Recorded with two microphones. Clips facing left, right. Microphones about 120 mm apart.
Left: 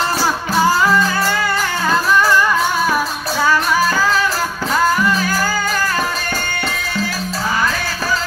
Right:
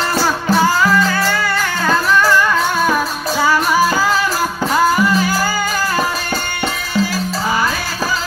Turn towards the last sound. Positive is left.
turn(degrees=-5)  # may be behind; listen again after turning